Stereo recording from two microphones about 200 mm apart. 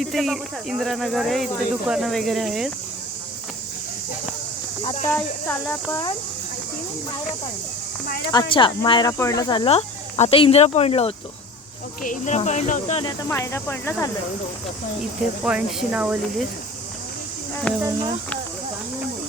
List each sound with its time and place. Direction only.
0.0 s speech: centre (ahead or behind)
4.8 s speech: 25° left (ahead or behind)
5.0 s speech: 10° left (ahead or behind)
8.0 s speech: 50° left (ahead or behind)
8.3 s speech: 25° left (ahead or behind)
13.0 s speech: 20° left (ahead or behind)
15.4 s speech: 5° right (ahead or behind)
17.7 s speech: 15° right (ahead or behind)